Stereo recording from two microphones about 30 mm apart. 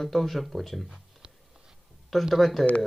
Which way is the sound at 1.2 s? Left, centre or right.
Right.